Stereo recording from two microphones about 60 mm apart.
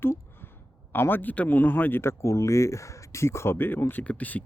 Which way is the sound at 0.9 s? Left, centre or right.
Left.